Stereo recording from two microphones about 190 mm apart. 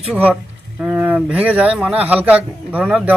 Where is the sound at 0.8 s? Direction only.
10° right (ahead or behind).